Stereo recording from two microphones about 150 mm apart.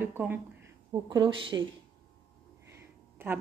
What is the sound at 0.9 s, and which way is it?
Speech, 30° right (ahead or behind).